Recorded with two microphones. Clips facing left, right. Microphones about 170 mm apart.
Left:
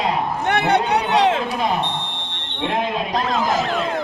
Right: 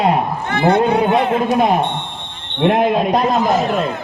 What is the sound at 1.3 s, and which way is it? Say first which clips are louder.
Speech: right 7 dB; 50° right (ahead or behind).